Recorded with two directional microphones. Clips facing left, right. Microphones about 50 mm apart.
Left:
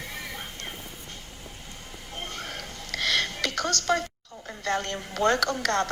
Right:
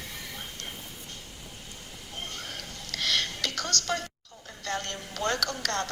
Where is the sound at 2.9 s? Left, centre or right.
Left.